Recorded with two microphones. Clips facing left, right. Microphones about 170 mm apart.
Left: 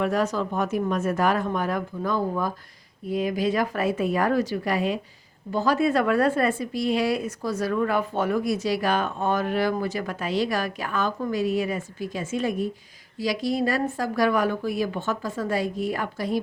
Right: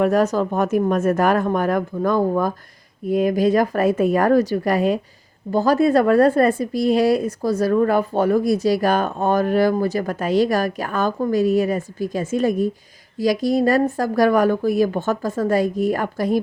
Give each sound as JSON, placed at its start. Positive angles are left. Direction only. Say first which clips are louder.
{"t": 0.0, "sound": "a woman's voice", "louder": "right 7 dB", "side_deg": -45}